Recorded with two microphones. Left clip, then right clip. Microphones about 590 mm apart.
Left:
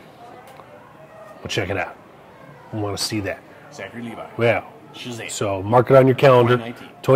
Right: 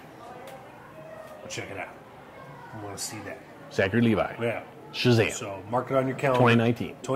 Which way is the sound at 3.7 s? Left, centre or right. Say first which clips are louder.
Right 9 dB; right.